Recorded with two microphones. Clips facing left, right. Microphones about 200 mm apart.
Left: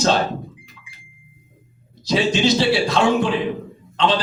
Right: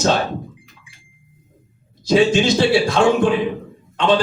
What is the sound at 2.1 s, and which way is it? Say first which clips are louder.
A man's voice: right 4 dB; 50° right (ahead or behind).